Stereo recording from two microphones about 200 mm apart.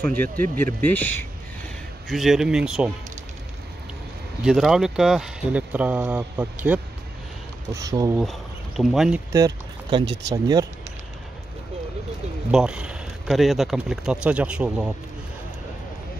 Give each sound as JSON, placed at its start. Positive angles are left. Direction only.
{"t": 0.0, "sound": "speech", "side_deg": 10}
{"t": 4.5, "sound": "speech", "side_deg": 0}
{"t": 8.2, "sound": "speech", "side_deg": 0}
{"t": 9.3, "sound": "boat", "side_deg": -20}
{"t": 10.3, "sound": "speech", "side_deg": -20}
{"t": 12.4, "sound": "speech", "side_deg": -5}